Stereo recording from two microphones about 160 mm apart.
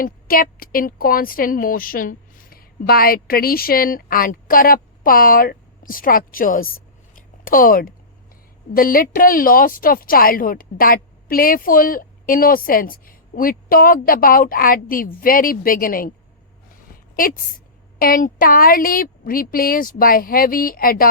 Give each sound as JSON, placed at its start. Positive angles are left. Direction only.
{"t": 0.0, "sound": "a woman's voice", "side_deg": 65}
{"t": 7.2, "sound": "a sound", "side_deg": 60}
{"t": 8.7, "sound": "a woman's voice", "side_deg": 65}
{"t": 17.2, "sound": "a woman's voice", "side_deg": 60}